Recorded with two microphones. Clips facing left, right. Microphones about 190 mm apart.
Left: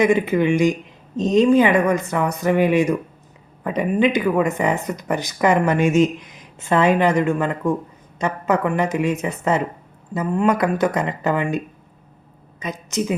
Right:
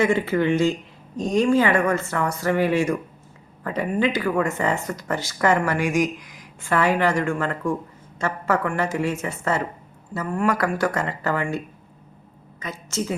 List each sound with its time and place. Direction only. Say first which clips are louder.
0.0 s a woman's voice: left 3 dB; 15° left (ahead or behind)